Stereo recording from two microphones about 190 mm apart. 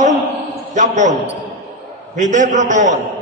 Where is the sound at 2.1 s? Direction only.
40° right (ahead or behind).